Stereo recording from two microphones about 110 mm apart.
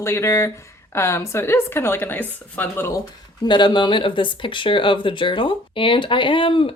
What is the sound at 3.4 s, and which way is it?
Speech, 45° left (ahead or behind).